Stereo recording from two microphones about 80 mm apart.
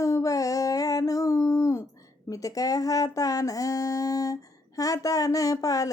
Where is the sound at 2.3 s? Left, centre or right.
Left.